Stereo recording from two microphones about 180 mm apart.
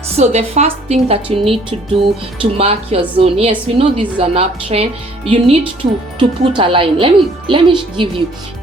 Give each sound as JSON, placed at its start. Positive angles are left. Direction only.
{"t": 0.2, "sound": "a woman's voice", "side_deg": -35}